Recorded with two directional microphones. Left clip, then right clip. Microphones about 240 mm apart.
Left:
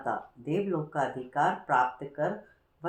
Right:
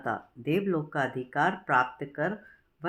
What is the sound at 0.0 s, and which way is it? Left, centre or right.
Speech, right.